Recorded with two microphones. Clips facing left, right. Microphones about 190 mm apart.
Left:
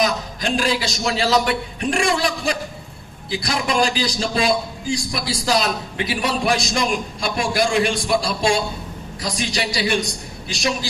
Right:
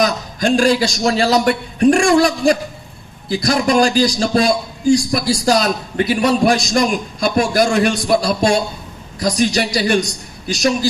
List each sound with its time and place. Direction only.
0.0 s a man's voice: 45° right (ahead or behind)